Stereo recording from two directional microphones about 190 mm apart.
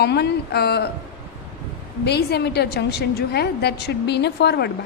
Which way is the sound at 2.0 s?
60° left (ahead or behind).